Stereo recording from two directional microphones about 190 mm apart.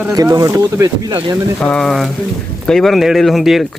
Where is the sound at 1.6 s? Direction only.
5° left (ahead or behind).